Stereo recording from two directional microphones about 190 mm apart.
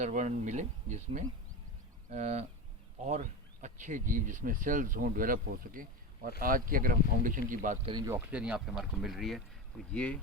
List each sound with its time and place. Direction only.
0.0 s speech: 40° right (ahead or behind)
7.9 s speech: 20° right (ahead or behind); by 10.2 s 5° left (ahead or behind)